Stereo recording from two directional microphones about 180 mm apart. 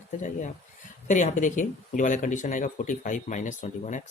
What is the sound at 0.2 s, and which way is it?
Speech, 45° left (ahead or behind).